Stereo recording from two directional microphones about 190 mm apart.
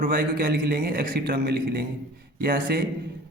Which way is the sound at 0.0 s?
50° right (ahead or behind).